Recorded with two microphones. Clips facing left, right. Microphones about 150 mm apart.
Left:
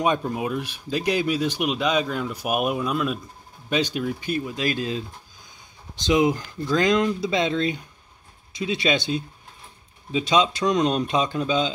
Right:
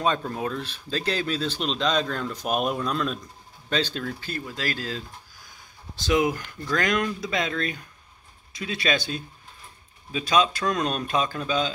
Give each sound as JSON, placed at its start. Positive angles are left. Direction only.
{"t": 0.0, "sound": "speech", "side_deg": 15}